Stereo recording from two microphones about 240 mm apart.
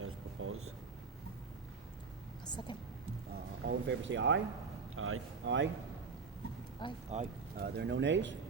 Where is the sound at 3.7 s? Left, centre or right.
Right.